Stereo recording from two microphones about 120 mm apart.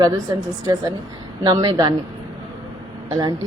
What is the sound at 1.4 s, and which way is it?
Speech, 40° right (ahead or behind).